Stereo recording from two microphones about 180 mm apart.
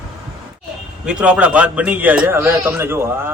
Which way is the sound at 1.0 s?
5° right (ahead or behind).